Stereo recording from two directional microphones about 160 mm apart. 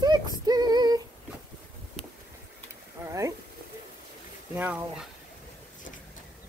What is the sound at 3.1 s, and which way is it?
Speech, 20° right (ahead or behind).